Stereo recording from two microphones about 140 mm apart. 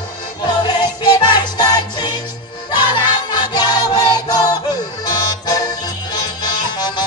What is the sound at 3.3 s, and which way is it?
Music, 30° left (ahead or behind).